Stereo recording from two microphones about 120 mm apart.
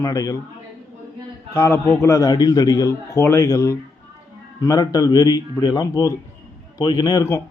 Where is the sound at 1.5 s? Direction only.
20° left (ahead or behind).